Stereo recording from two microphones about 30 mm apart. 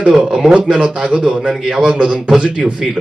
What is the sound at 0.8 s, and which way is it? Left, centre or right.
A man's voice, right.